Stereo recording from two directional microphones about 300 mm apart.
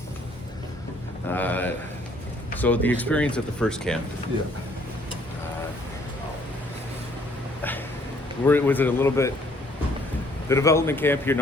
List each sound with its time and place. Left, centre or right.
1.3 s a sound: centre
2.6 s speech: centre
8.4 s speech: centre
10.5 s speech: centre